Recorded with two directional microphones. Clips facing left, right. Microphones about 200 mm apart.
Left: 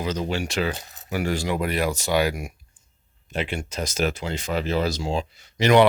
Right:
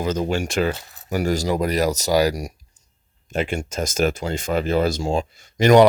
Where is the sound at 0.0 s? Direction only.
50° right (ahead or behind).